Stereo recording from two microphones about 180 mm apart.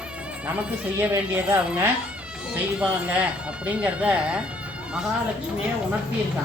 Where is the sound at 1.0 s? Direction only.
10° right (ahead or behind).